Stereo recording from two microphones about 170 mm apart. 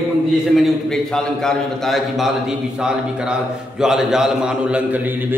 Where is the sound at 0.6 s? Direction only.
5° left (ahead or behind).